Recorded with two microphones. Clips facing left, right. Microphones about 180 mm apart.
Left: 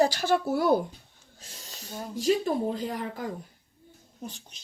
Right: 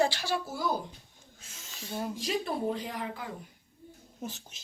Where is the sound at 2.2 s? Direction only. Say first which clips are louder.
Left 10 dB; 40° left (ahead or behind).